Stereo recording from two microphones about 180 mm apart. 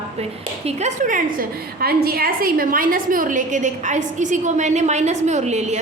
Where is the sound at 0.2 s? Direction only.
35° right (ahead or behind).